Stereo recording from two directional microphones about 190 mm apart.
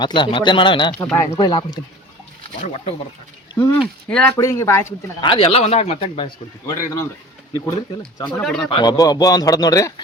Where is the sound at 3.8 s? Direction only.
5° left (ahead or behind).